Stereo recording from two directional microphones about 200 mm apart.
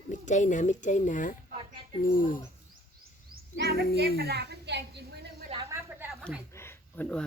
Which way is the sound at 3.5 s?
55° right (ahead or behind).